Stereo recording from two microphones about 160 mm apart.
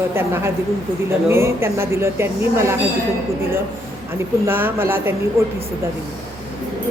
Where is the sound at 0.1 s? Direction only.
15° right (ahead or behind).